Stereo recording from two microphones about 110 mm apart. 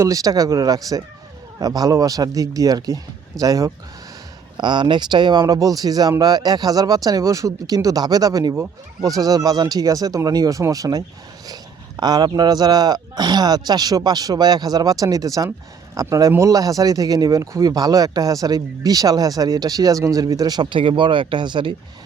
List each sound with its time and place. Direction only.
0.0 s speech: 30° right (ahead or behind)
4.5 s speech: 45° right (ahead or behind)